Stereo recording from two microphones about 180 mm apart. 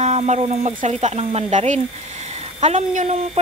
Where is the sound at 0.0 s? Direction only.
40° right (ahead or behind).